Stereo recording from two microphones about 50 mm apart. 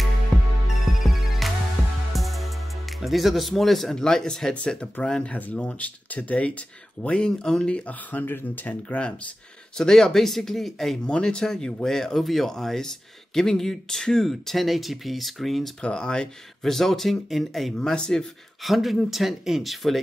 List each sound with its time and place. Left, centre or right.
0.3 s music: centre
0.9 s music: centre
3.0 s speech: centre
3.9 s speech: centre
4.6 s speech: left
5.3 s speech: left
8.1 s speech: left
9.8 s speech: centre
11.1 s speech: centre
15.8 s speech: centre
18.6 s speech: centre